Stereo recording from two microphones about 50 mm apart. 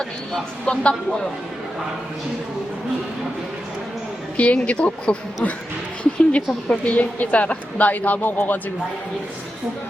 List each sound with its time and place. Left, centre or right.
0.6 s speech: centre
4.4 s a woman's voice: left